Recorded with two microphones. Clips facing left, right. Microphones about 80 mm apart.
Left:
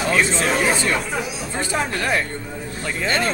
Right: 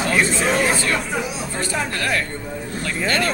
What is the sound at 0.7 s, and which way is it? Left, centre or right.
Speech, centre.